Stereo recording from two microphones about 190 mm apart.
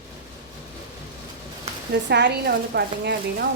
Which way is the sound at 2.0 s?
65° right (ahead or behind).